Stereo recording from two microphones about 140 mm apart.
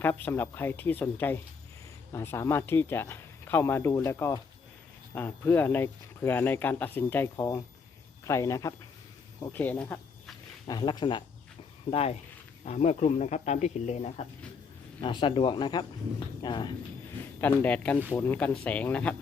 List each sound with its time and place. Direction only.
0.0 s speech: 15° left (ahead or behind)
7.3 s a man's voice: 25° left (ahead or behind)
9.5 s speech: 10° left (ahead or behind)
10.7 s speech: 30° left (ahead or behind)
11.9 s a man's voice: 45° left (ahead or behind)
15.0 s speech: 35° left (ahead or behind)
17.4 s speech: 10° left (ahead or behind)